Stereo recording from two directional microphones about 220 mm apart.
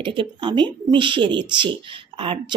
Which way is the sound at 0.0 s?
20° right (ahead or behind).